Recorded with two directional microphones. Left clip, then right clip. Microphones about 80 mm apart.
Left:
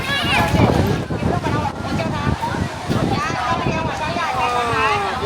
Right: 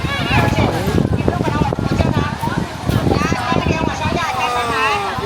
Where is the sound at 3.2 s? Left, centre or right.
Right.